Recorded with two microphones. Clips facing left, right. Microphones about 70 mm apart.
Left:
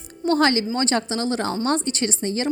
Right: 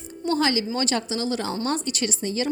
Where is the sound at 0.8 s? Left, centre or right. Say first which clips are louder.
Left 3 dB; left.